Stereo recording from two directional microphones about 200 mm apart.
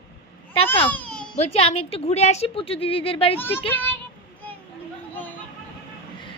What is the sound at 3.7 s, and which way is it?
Speech, 10° left (ahead or behind).